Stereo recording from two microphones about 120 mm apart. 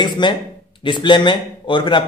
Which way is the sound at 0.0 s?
40° left (ahead or behind).